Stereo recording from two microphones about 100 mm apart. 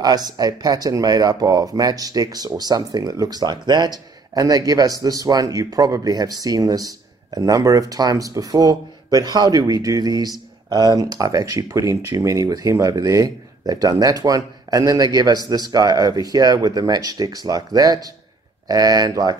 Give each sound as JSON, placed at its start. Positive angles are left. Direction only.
{"t": 0.0, "sound": "speech", "side_deg": -40}